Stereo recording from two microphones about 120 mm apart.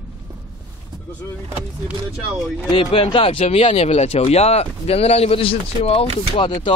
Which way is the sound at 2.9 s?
50° left (ahead or behind).